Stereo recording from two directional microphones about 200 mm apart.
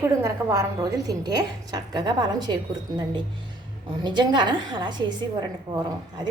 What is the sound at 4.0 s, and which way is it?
A woman's voice, 20° right (ahead or behind).